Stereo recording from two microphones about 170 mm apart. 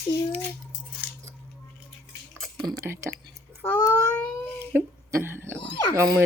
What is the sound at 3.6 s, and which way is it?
Speech, 10° left (ahead or behind).